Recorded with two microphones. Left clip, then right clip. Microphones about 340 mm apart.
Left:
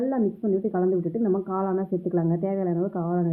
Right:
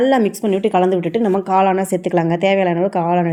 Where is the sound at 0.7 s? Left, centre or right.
Right.